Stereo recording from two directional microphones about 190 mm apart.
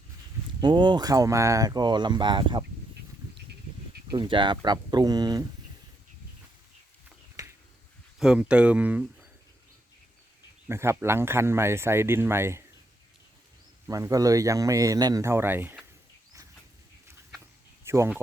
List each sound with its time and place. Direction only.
0.6 s speech: 25° right (ahead or behind)
4.1 s speech: 25° right (ahead or behind)
7.4 s a sound: 20° right (ahead or behind)
8.2 s speech: 5° right (ahead or behind)
10.7 s speech: 15° right (ahead or behind)
13.8 s speech: 15° right (ahead or behind)
17.8 s speech: 15° right (ahead or behind)